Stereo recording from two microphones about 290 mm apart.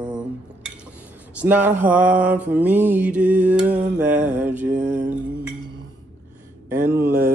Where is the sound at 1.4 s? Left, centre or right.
Centre.